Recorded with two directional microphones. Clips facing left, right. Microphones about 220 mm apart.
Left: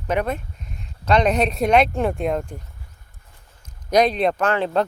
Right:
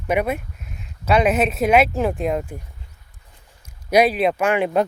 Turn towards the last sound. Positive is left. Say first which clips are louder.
# right 2 dB
turn(degrees=-15)  # may be behind; listen again after turning